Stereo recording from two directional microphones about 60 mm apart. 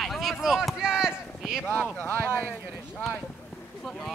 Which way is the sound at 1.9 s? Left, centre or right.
Left.